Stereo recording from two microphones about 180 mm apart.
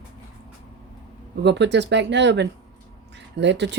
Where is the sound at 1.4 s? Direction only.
75° right (ahead or behind).